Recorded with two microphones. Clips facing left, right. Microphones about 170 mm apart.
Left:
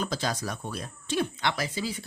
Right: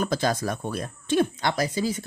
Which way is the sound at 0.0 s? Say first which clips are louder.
Right 6 dB; 50° right (ahead or behind).